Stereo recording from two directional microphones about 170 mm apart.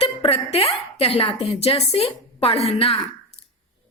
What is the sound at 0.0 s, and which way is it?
A woman's voice, 35° left (ahead or behind).